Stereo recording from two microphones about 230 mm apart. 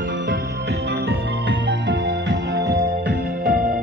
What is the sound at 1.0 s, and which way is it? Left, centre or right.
Music, right.